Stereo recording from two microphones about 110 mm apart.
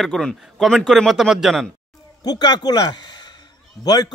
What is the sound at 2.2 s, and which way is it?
A man's voice, 40° left (ahead or behind).